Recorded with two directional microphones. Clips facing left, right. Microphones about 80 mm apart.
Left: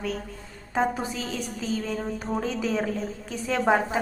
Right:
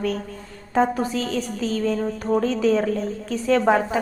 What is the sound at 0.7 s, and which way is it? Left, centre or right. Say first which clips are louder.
A woman's voice: right 5 dB; centre.